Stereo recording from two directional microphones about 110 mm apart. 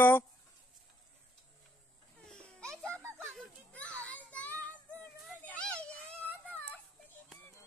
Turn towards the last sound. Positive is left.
turn(degrees=15)  # may be behind; listen again after turning